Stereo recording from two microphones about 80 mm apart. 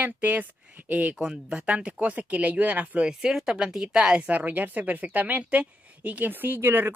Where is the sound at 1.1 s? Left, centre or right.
Centre.